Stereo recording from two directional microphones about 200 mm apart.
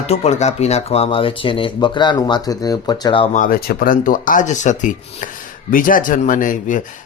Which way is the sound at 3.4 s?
50° left (ahead or behind).